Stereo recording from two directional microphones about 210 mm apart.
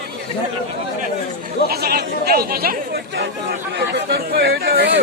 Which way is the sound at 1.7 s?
50° right (ahead or behind).